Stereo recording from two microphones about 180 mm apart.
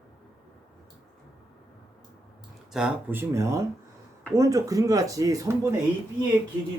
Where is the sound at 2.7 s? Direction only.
5° right (ahead or behind).